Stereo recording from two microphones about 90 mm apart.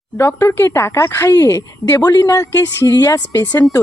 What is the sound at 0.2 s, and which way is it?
A woman's voice, 30° left (ahead or behind).